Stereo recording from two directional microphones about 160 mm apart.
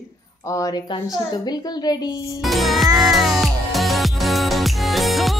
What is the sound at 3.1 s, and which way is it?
Music, centre (ahead or behind).